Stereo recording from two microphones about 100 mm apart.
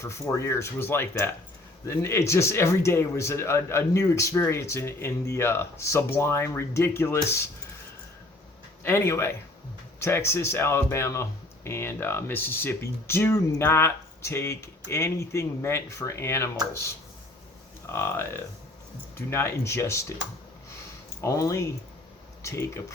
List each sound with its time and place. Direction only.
0.0 s speech: 30° left (ahead or behind)
8.8 s speech: 25° left (ahead or behind)
17.8 s speech: 25° left (ahead or behind)
21.2 s speech: 35° left (ahead or behind)